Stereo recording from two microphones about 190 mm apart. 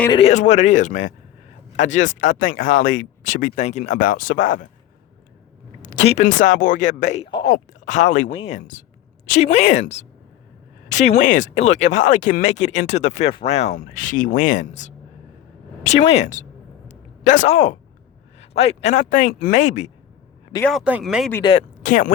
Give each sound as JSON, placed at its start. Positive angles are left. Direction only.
{"t": 0.1, "sound": "speech", "side_deg": 35}
{"t": 5.8, "sound": "speech", "side_deg": 35}
{"t": 7.3, "sound": "speech", "side_deg": 25}
{"t": 7.5, "sound": "speech", "side_deg": 40}
{"t": 16.0, "sound": "speech", "side_deg": 35}
{"t": 20.6, "sound": "speech", "side_deg": 5}
{"t": 21.8, "sound": "speech", "side_deg": 45}